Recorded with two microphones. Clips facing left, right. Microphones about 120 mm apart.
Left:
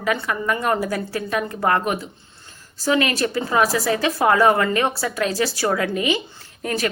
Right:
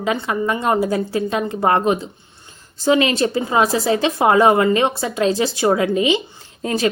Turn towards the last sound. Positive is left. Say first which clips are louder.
# right 4 dB
turn(degrees=-25)  # may be behind; listen again after turning